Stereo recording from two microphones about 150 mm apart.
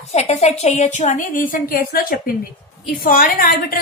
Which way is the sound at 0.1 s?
45° left (ahead or behind).